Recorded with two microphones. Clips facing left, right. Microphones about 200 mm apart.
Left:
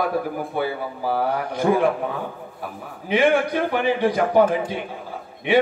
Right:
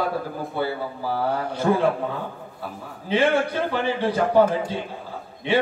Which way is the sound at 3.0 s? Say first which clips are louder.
Left 2 dB; 15° left (ahead or behind).